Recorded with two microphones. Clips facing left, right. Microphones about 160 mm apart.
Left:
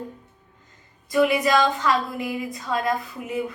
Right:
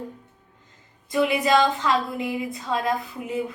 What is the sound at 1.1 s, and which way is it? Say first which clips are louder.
A woman's voice: left 1 dB; 20° right (ahead or behind).